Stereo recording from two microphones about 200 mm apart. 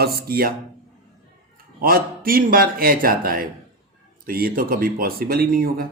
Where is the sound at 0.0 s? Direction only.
50° right (ahead or behind).